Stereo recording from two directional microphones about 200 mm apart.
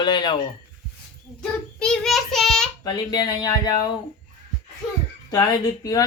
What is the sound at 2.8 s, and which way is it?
Speech, 20° left (ahead or behind).